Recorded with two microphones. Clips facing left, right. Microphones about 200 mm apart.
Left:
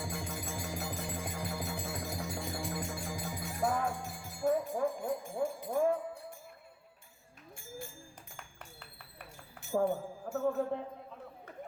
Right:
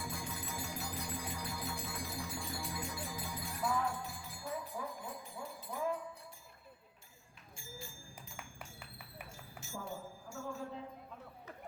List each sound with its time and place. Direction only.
0.0 s music: 45° left (ahead or behind)
8.4 s music: 10° right (ahead or behind)
9.6 s a sound: 55° left (ahead or behind)